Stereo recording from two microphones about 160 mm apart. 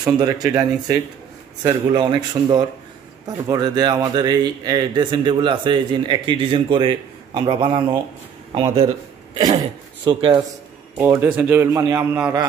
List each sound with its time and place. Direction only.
0.0 s a man's voice: 25° right (ahead or behind)
11.0 s speech: 15° right (ahead or behind)